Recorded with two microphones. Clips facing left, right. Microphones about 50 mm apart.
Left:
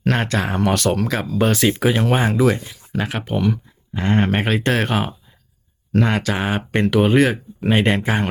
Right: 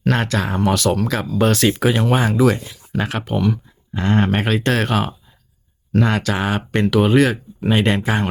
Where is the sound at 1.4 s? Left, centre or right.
Centre.